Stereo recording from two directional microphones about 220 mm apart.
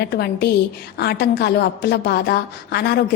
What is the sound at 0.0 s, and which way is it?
A woman's voice, 45° left (ahead or behind).